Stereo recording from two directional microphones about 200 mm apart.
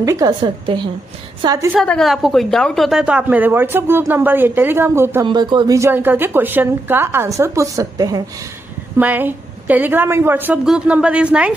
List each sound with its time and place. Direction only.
0.0 s a woman's voice: 15° right (ahead or behind)
1.7 s a woman's voice: centre (ahead or behind)
5.2 s a woman's voice: 20° right (ahead or behind); by 11.5 s 5° right (ahead or behind)